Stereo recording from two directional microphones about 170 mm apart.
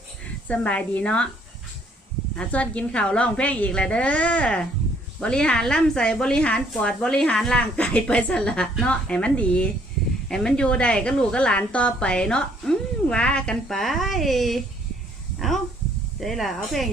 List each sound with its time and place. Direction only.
0.4 s a woman's voice: 5° left (ahead or behind)
2.4 s a woman's voice: 10° left (ahead or behind)
15.4 s a sound: centre (ahead or behind)
16.2 s a woman's voice: centre (ahead or behind)